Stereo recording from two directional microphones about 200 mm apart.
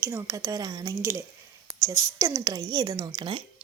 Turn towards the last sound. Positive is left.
turn(degrees=-25)  # may be behind; listen again after turning